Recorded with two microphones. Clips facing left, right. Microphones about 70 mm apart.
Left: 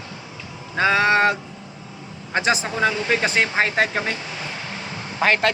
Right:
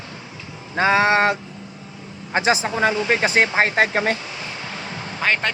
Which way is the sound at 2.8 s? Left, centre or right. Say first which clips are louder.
Right 2 dB; right.